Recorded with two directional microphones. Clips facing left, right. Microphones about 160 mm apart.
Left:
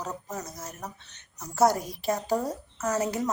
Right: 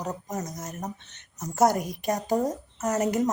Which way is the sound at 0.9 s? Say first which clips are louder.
Right 6 dB; 20° right (ahead or behind).